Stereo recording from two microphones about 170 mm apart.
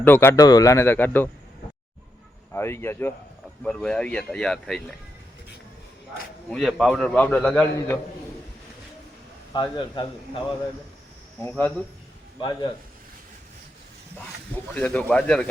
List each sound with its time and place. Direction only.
0.0 s a man's voice: 10° left (ahead or behind)
2.5 s a man's voice: 15° left (ahead or behind)
6.5 s a man's voice: centre (ahead or behind)
9.5 s a man's voice: 25° left (ahead or behind)
11.3 s a man's voice: 10° left (ahead or behind)
12.4 s a man's voice: 25° left (ahead or behind)
14.5 s a man's voice: 10° left (ahead or behind)